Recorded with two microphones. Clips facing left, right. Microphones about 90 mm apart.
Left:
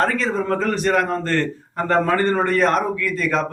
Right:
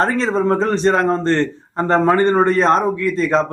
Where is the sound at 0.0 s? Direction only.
30° right (ahead or behind).